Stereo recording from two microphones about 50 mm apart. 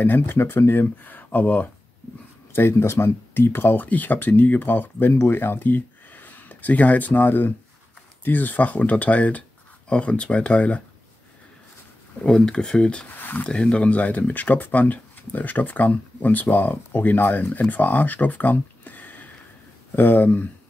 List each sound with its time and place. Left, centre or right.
0.0 s speech: left
2.5 s speech: left
3.8 s speech: left
12.2 s speech: centre
13.1 s speech: left
13.5 s speech: centre; by 20.4 s left